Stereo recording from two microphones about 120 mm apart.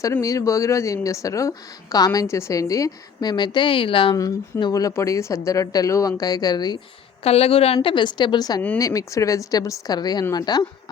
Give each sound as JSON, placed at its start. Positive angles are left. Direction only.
{"t": 0.2, "sound": "a woman's voice", "side_deg": 25}
{"t": 4.2, "sound": "a woman's voice", "side_deg": 30}
{"t": 7.3, "sound": "a woman's voice", "side_deg": 55}